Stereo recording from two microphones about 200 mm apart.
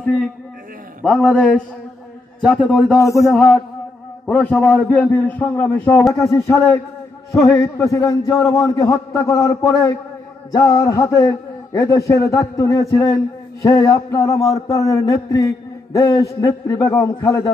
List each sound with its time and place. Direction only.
1.0 s a man's voice: centre (ahead or behind)
3.0 s speech: 15° left (ahead or behind)
3.3 s a man's voice: 5° left (ahead or behind)